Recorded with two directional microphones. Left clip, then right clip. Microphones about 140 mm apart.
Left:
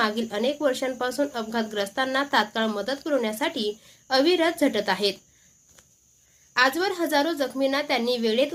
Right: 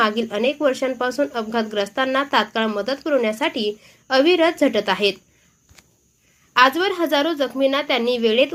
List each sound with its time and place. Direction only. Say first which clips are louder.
0.0 s a woman's voice: right 5 dB; 15° right (ahead or behind)
6.5 s speech: right 6 dB; 25° right (ahead or behind)